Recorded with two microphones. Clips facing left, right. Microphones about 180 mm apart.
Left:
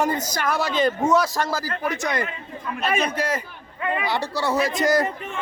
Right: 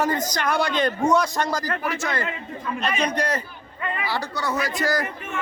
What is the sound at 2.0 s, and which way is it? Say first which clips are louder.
Speech: left 2 dB; 15° left (ahead or behind).